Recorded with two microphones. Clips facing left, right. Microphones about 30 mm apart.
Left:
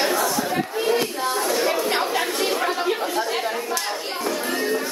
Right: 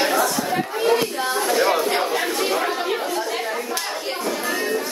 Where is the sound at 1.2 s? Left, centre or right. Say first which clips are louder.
Right 4 dB; centre.